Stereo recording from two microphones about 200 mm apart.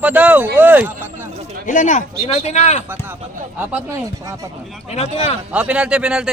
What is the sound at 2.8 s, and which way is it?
Speech, 10° right (ahead or behind).